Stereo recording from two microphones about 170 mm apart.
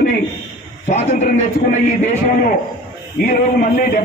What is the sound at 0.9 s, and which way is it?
A man's voice, 40° left (ahead or behind).